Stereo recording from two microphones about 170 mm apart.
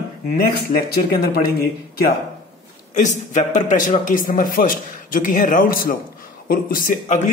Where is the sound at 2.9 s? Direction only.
45° left (ahead or behind).